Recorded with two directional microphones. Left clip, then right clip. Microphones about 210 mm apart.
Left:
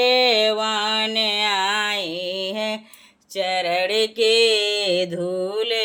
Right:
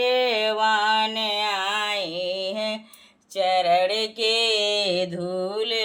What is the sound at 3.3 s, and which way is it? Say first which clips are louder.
Mantra: right 2 dB; 40° left (ahead or behind).